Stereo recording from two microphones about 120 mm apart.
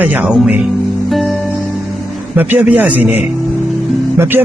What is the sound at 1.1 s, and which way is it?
Music, centre (ahead or behind).